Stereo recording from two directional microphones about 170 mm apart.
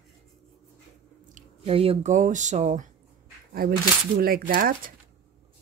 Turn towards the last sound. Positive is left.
turn(degrees=-55)  # may be behind; listen again after turning